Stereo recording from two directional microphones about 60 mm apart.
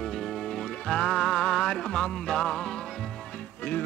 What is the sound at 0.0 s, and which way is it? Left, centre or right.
Music, centre.